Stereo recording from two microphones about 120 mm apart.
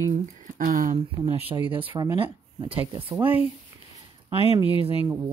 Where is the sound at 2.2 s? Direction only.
50° right (ahead or behind).